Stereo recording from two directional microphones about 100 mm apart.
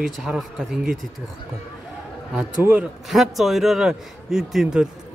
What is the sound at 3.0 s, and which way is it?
A man's voice, centre (ahead or behind).